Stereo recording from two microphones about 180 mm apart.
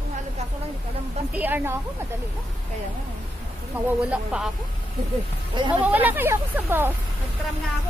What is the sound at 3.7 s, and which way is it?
Speech, 10° right (ahead or behind).